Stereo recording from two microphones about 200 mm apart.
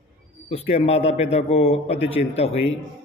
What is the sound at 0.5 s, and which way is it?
A man's voice, 30° left (ahead or behind).